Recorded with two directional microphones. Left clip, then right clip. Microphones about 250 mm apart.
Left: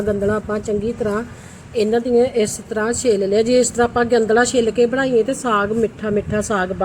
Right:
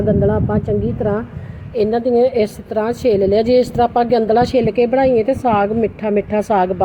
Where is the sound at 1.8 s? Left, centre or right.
Centre.